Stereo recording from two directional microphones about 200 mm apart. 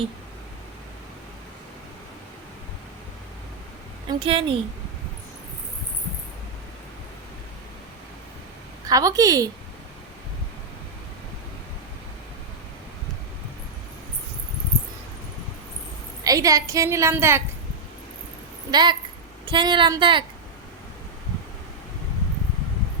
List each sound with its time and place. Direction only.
4.2 s a woman's voice: 25° right (ahead or behind)
8.9 s a woman's voice: 15° right (ahead or behind)
16.2 s a woman's voice: 15° right (ahead or behind)
18.7 s a woman's voice: 20° right (ahead or behind)